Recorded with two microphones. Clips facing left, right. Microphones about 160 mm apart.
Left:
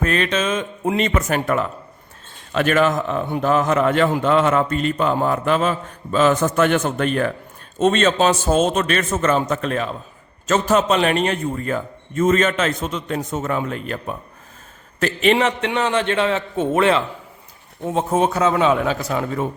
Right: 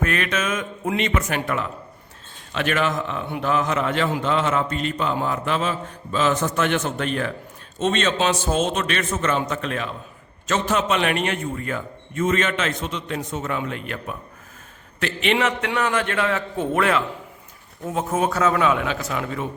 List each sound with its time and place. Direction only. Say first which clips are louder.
0.0 s a man's voice: left 4 dB; 30° left (ahead or behind)